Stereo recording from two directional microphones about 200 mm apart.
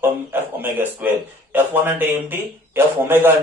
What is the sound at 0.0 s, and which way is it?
A man's voice, 10° right (ahead or behind).